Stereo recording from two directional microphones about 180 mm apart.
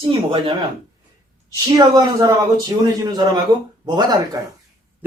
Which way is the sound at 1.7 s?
20° right (ahead or behind).